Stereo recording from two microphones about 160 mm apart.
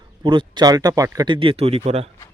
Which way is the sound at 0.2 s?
30° right (ahead or behind).